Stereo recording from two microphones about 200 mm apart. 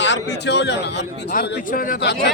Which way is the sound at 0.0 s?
60° left (ahead or behind).